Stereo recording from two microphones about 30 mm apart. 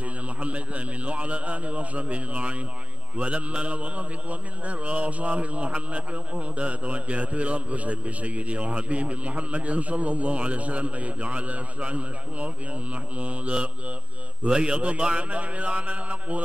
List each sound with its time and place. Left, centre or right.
0.0 s a man's voice: right
14.5 s a man's voice: right
15.2 s a man's voice: right